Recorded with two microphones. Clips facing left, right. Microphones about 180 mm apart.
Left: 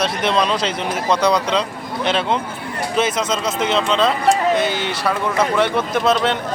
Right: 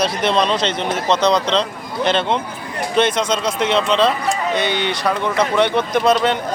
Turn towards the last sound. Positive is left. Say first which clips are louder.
# right 2 dB
turn(degrees=0)  # may be behind; listen again after turning